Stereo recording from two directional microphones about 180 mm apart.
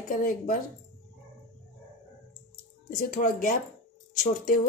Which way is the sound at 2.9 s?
50° left (ahead or behind).